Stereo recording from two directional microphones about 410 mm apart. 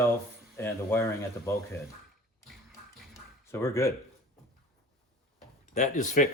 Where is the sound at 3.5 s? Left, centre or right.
Centre.